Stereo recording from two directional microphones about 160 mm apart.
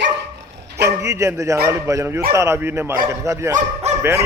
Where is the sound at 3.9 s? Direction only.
45° right (ahead or behind).